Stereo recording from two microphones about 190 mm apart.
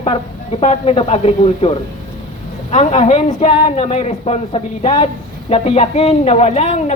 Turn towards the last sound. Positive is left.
turn(degrees=35)  # may be behind; listen again after turning